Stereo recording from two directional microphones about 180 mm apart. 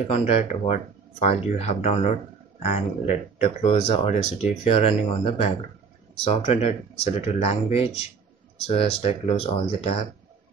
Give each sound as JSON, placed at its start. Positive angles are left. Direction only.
{"t": 0.1, "sound": "speech", "side_deg": 40}